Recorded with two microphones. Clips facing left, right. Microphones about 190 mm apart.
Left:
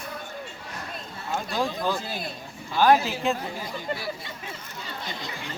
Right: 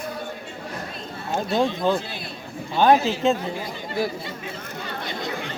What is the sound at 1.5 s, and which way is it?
Speech, 20° right (ahead or behind).